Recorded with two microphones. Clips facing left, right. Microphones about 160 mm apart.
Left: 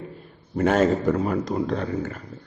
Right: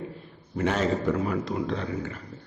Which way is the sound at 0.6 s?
50° left (ahead or behind).